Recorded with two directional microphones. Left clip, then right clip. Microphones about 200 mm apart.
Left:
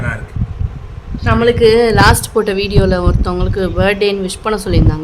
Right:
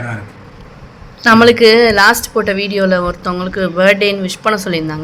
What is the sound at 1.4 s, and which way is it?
Speech, centre (ahead or behind).